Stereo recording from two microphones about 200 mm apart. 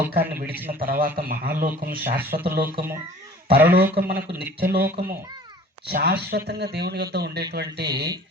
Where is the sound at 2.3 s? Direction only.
45° right (ahead or behind).